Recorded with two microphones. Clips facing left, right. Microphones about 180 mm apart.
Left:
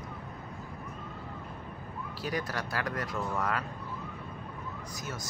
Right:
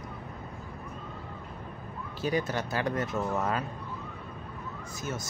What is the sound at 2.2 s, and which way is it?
Speech, 25° right (ahead or behind).